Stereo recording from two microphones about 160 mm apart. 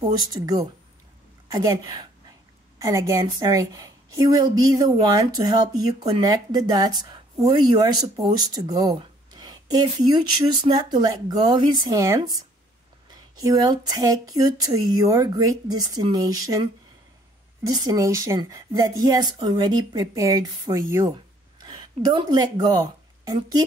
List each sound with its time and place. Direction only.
0.0 s speech: 25° right (ahead or behind)
17.6 s speech: 25° right (ahead or behind)